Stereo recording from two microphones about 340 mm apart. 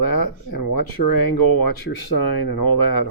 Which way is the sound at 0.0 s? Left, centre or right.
Left.